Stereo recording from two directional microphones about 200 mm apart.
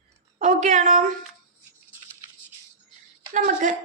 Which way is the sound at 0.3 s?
35° right (ahead or behind).